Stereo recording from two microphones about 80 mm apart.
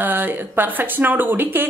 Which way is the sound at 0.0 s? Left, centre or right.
Right.